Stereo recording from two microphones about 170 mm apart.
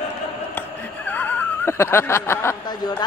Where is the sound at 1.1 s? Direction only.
10° left (ahead or behind).